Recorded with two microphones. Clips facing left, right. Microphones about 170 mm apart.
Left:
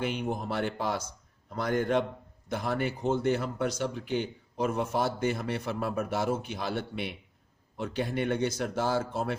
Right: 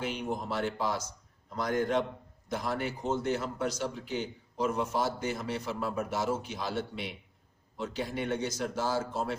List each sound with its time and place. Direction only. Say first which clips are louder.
0.0 s speech: left 2 dB; 55° left (ahead or behind)